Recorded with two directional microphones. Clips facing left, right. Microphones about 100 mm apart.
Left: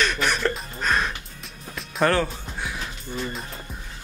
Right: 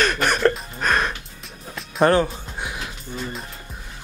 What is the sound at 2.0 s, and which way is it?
Music, 20° right (ahead or behind).